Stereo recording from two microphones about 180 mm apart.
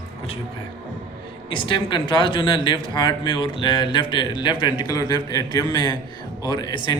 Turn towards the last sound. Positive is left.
turn(degrees=25)  # may be behind; listen again after turning